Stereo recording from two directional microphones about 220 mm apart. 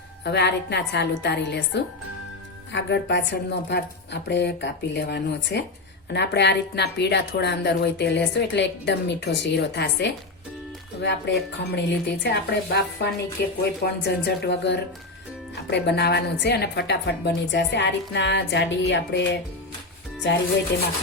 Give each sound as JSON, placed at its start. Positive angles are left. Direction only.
{"t": 0.3, "sound": "a woman's voice", "side_deg": 50}